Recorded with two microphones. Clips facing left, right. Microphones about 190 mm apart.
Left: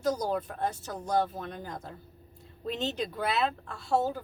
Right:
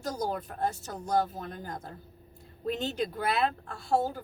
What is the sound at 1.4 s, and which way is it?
A woman's voice, 50° right (ahead or behind).